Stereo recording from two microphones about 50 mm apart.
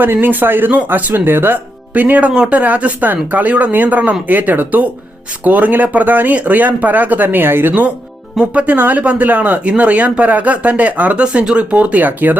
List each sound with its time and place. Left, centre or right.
0.0 s speech: right
1.9 s speech: right
2.3 s speech: centre
2.6 s speech: right
8.5 s speech: right